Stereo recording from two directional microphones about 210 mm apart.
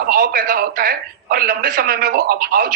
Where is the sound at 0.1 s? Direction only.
45° right (ahead or behind).